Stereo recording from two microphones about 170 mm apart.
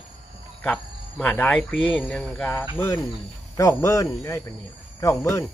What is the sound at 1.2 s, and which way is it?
Speech, 10° left (ahead or behind).